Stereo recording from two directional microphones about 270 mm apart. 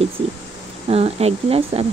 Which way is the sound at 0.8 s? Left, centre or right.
Right.